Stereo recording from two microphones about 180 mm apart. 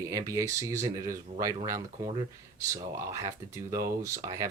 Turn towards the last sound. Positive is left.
turn(degrees=-15)  # may be behind; listen again after turning